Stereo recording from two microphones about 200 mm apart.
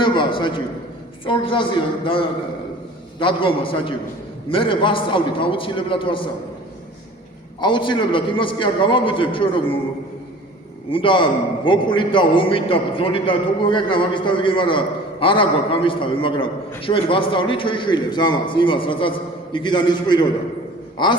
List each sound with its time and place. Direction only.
0.0 s a man's voice: 25° left (ahead or behind)
7.6 s a man's voice: 25° left (ahead or behind)
10.9 s a man's voice: 25° left (ahead or behind)